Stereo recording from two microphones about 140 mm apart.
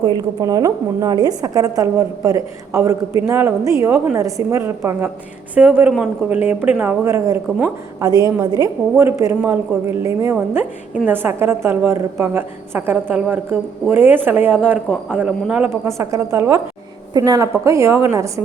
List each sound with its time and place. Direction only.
0.0 s a woman's voice: 30° right (ahead or behind); by 15.7 s 5° right (ahead or behind)
15.7 s a woman's voice: 20° right (ahead or behind)